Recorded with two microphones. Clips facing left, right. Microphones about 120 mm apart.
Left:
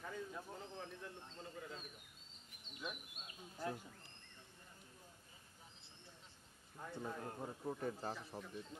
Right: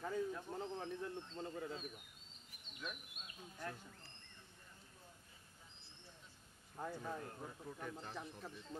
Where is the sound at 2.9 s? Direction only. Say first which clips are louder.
Left 1 dB; 15° left (ahead or behind).